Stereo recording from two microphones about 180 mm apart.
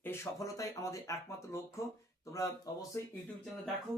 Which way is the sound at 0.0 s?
15° left (ahead or behind).